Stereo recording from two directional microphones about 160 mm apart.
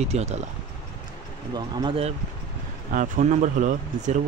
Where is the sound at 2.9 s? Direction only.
55° right (ahead or behind).